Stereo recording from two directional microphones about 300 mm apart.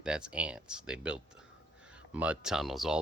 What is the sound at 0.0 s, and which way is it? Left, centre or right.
Speech, centre.